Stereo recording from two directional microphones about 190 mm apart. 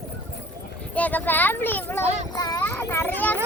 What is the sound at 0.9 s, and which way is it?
Speech, 10° left (ahead or behind).